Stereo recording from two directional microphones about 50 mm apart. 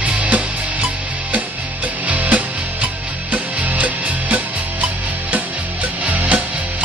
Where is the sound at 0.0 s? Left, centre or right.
Right.